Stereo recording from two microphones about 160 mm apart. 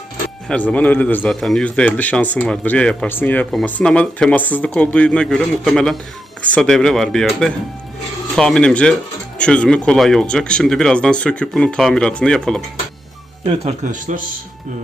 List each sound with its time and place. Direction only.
0.4 s a man's voice: 10° left (ahead or behind)
13.8 s speech: 55° right (ahead or behind)